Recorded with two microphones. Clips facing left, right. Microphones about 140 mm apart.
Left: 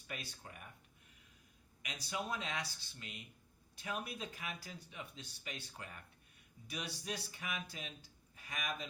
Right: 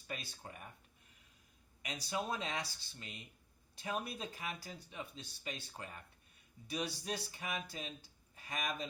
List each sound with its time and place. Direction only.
0.1 s speech: 30° right (ahead or behind)
1.8 s speech: 35° right (ahead or behind)